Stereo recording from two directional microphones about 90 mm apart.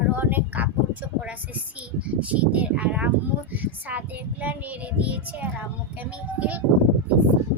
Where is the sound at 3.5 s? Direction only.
20° right (ahead or behind).